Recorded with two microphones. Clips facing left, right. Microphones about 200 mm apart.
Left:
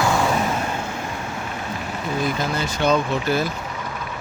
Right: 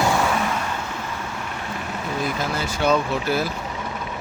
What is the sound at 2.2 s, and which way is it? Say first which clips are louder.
Speech: left 2 dB; 5° right (ahead or behind).